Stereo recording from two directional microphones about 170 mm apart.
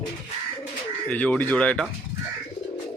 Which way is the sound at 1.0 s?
5° left (ahead or behind).